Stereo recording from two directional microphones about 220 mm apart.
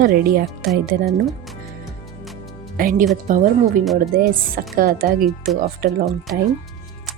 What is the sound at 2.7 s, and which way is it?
Speech, 40° right (ahead or behind).